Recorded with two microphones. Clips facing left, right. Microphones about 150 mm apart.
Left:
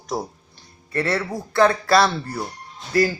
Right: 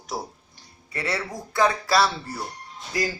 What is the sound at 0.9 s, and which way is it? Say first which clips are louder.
Speech: left 6 dB; 55° left (ahead or behind).